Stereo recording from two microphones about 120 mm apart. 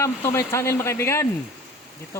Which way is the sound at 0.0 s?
20° left (ahead or behind).